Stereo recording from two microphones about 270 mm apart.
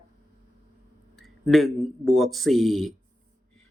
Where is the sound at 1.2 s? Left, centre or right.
Centre.